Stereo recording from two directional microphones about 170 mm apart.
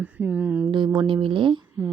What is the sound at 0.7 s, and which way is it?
Speech, 25° right (ahead or behind).